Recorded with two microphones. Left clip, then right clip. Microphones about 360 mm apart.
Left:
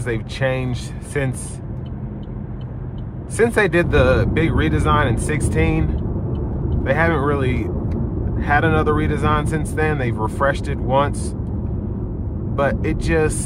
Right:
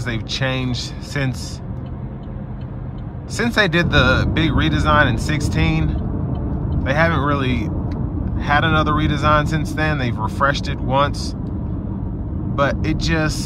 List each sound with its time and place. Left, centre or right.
0.0 s speech: centre
3.3 s speech: centre
12.5 s speech: centre